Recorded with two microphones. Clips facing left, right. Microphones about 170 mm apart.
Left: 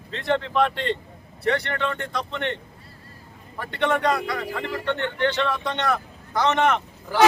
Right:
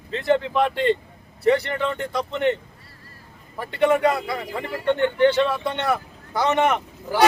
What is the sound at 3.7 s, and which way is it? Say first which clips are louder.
A man's voice: right 4 dB; 5° right (ahead or behind).